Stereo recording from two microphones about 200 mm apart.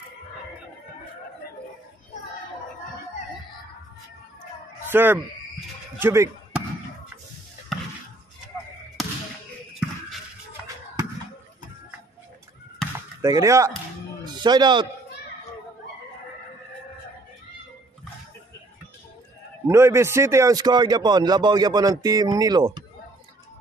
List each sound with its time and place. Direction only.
4.9 s speech: 10° right (ahead or behind)
5.9 s a sound: 15° right (ahead or behind)
9.0 s basketball bounce: centre (ahead or behind)
9.8 s a sound: centre (ahead or behind)
12.8 s chop: centre (ahead or behind)
13.2 s a man's voice: 15° right (ahead or behind)
19.7 s a man's voice: 15° right (ahead or behind)